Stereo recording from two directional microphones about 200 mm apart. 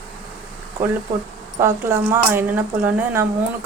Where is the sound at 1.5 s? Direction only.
15° right (ahead or behind).